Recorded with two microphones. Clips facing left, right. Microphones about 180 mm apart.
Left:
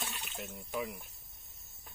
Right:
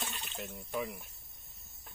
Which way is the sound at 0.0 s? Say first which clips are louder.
Right 1 dB; centre (ahead or behind).